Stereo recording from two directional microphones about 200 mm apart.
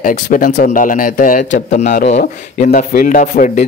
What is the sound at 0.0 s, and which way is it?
Speech, 40° left (ahead or behind).